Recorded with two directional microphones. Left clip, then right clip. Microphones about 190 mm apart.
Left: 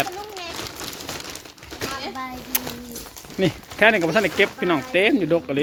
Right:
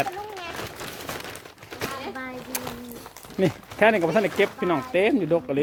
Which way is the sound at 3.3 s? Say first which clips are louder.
Left 2 dB; 5° right (ahead or behind).